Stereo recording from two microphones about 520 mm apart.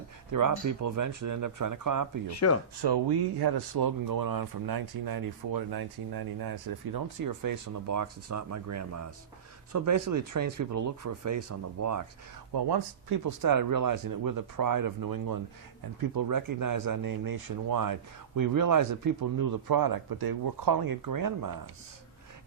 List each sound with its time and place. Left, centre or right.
0.3 s speech: right
2.2 s speech: left
2.8 s speech: right
12.5 s speech: right